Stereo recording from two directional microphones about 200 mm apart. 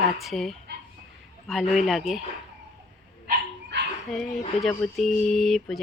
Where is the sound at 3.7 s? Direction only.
60° right (ahead or behind).